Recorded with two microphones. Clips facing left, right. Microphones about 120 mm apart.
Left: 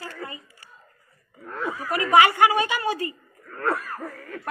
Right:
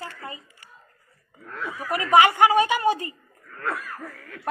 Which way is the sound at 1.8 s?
15° right (ahead or behind).